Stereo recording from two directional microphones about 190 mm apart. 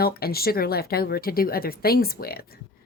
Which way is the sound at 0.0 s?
55° left (ahead or behind).